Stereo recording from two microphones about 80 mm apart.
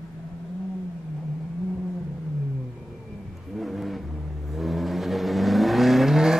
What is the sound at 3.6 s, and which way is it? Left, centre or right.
Vehicle, centre.